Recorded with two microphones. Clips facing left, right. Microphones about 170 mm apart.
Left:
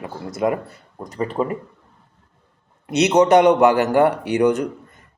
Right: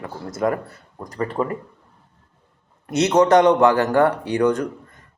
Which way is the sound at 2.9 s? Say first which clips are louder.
Left 1 dB; 20° left (ahead or behind).